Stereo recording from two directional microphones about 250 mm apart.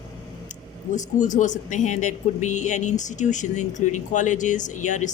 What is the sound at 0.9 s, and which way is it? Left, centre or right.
Speech, left.